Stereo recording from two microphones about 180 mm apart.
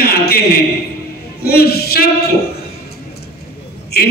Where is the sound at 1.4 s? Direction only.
60° left (ahead or behind).